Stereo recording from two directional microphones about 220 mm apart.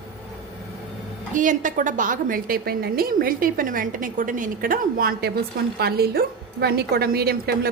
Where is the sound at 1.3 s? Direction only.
35° right (ahead or behind).